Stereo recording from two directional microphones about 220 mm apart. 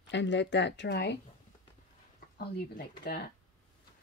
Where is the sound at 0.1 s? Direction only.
55° left (ahead or behind).